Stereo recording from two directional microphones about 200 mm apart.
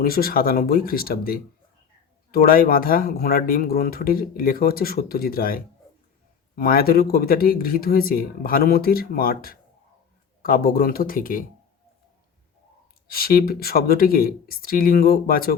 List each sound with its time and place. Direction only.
0.0 s speech: 50° left (ahead or behind)
13.1 s speech: 50° left (ahead or behind)